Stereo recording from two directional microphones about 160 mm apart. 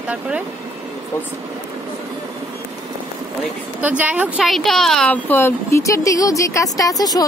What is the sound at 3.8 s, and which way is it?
Speech, 10° right (ahead or behind).